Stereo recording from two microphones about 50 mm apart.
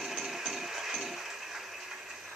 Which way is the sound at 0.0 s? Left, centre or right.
Centre.